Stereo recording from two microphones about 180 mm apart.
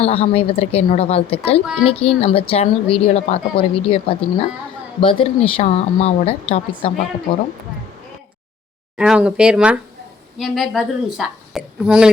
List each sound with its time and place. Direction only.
0.0 s a woman's voice: 35° left (ahead or behind)
9.0 s a woman's voice: 5° right (ahead or behind)